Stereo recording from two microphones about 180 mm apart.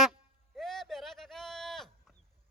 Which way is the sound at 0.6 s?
Centre (ahead or behind).